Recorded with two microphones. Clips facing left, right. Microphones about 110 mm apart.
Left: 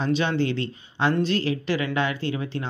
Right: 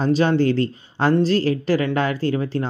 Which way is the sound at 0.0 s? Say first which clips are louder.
Right 6 dB; 40° right (ahead or behind).